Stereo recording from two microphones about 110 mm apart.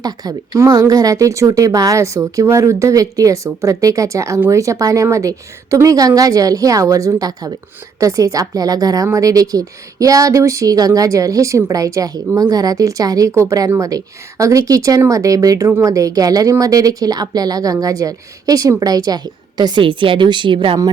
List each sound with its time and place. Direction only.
0.0 s a woman's voice: 35° right (ahead or behind)